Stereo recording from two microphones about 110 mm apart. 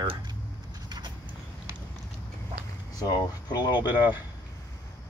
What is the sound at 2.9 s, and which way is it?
Speech, 35° left (ahead or behind).